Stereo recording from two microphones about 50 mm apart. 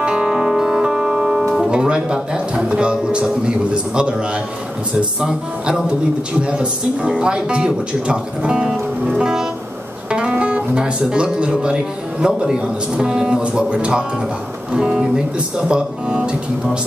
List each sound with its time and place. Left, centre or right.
0.0 s music: centre
1.7 s a man's voice: centre
5.2 s speech: centre
6.4 s a man's voice: right